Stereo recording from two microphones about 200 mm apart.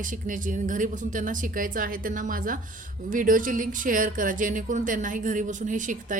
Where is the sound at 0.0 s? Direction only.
40° right (ahead or behind).